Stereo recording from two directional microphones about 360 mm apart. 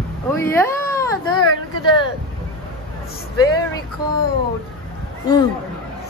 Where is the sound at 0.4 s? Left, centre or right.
Centre.